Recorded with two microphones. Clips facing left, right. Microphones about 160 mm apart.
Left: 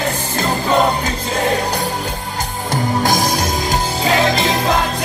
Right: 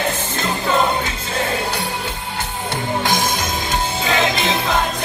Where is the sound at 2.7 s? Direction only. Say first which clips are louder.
Left 4 dB; 40° left (ahead or behind).